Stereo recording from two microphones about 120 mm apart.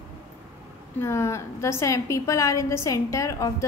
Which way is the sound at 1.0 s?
20° left (ahead or behind).